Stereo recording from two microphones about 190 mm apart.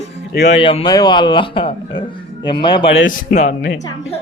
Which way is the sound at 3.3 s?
40° left (ahead or behind).